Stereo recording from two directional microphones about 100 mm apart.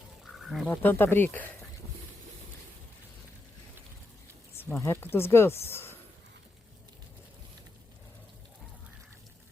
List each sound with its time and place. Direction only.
0.3 s a sound: centre (ahead or behind)
0.7 s speech: 20° left (ahead or behind)
4.5 s speech: 25° left (ahead or behind)